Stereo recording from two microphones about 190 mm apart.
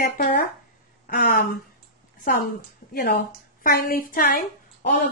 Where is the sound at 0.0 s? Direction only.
50° left (ahead or behind).